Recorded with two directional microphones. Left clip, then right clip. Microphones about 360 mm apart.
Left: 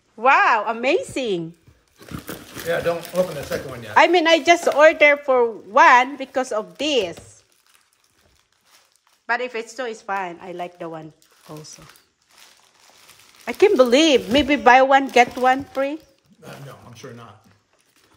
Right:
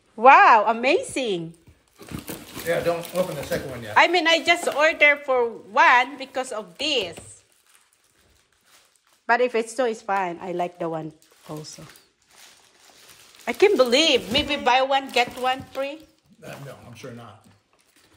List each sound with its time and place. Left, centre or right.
0.1 s speech: centre
2.7 s speech: centre
9.2 s a woman's voice: centre
13.5 s speech: centre
17.0 s speech: centre